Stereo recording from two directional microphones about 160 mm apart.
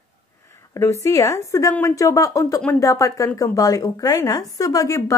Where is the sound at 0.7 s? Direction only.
20° left (ahead or behind).